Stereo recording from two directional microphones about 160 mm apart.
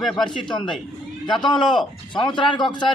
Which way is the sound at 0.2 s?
30° left (ahead or behind).